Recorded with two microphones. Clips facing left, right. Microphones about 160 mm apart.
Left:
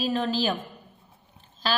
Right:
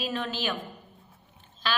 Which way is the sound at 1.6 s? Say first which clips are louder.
Left 3 dB; 35° left (ahead or behind).